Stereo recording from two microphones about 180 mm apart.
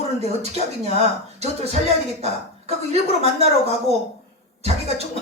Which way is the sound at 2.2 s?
35° right (ahead or behind).